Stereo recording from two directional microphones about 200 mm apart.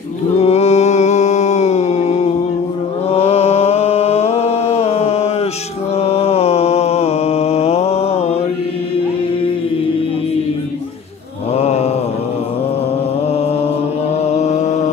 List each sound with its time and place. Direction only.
0.4 s mantra: 30° left (ahead or behind)
11.5 s mantra: 30° left (ahead or behind)
14.2 s mantra: 35° left (ahead or behind)